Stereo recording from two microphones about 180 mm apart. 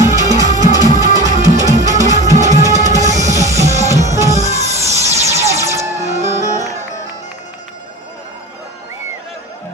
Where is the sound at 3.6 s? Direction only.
40° right (ahead or behind).